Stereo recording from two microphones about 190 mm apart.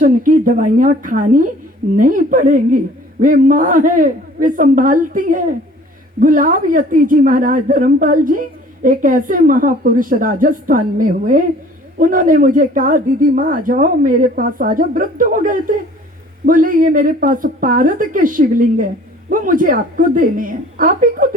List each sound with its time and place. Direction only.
0.0 s a woman's voice: 45° right (ahead or behind)